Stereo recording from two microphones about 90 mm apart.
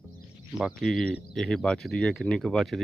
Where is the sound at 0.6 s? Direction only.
15° right (ahead or behind).